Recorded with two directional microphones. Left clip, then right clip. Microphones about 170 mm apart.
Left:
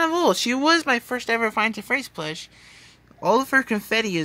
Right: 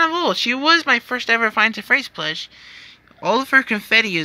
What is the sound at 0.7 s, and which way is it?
Speech, 10° left (ahead or behind).